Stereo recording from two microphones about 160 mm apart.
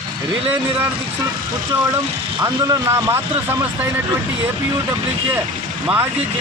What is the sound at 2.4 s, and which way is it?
Speech, 20° right (ahead or behind).